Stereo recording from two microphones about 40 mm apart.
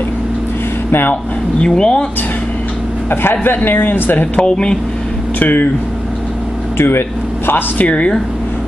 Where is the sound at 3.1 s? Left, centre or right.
Left.